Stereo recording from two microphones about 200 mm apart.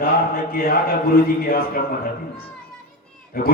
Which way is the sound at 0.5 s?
45° left (ahead or behind).